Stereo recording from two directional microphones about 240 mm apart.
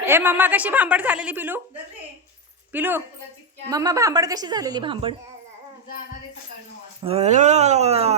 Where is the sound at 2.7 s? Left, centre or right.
Centre.